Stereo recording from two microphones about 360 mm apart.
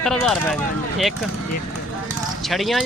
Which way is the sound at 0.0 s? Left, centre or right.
Centre.